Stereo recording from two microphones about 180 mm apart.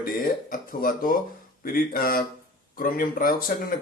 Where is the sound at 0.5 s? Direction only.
50° left (ahead or behind).